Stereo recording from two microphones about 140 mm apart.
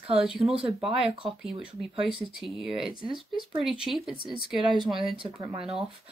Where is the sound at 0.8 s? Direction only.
40° right (ahead or behind).